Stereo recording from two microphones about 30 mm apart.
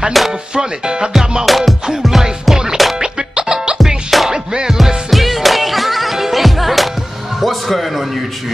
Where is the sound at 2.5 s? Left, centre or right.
Centre.